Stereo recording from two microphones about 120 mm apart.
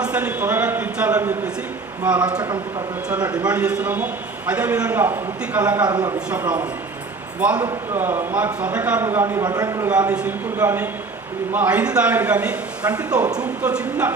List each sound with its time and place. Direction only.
0.0 s a man's voice: 10° right (ahead or behind)
5.8 s speech: 35° right (ahead or behind)
7.3 s a man's voice: 10° right (ahead or behind)
9.4 s speech: 30° right (ahead or behind)
9.8 s a man's voice: 10° right (ahead or behind)
11.5 s a man's voice: 15° right (ahead or behind)